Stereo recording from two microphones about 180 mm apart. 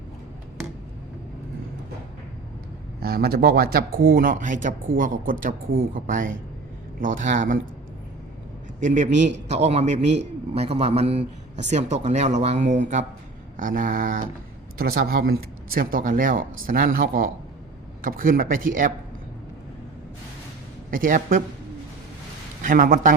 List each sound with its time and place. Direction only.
3.0 s speech: 55° right (ahead or behind)
8.8 s a man's voice: 45° right (ahead or behind)
20.9 s speech: 50° right (ahead or behind)
22.6 s speech: 50° right (ahead or behind)